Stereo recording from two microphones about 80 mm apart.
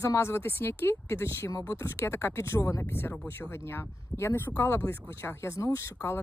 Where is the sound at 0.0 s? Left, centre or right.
Left.